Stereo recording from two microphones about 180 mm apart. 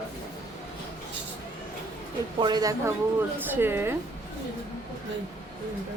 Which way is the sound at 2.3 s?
25° right (ahead or behind).